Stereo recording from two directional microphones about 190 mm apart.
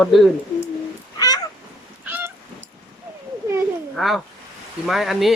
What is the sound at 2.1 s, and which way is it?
Goose, 10° right (ahead or behind).